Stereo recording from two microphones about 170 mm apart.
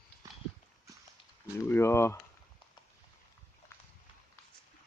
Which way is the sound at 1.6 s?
15° left (ahead or behind).